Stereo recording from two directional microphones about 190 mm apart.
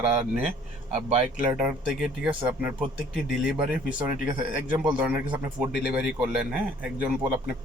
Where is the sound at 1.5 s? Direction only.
5° right (ahead or behind).